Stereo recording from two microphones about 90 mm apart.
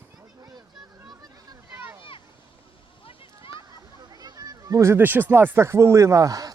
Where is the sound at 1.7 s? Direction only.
25° right (ahead or behind).